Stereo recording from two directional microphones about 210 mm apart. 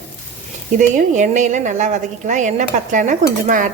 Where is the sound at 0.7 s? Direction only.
35° right (ahead or behind).